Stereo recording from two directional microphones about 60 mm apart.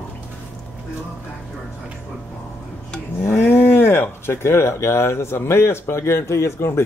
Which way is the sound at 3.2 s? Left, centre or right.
Left.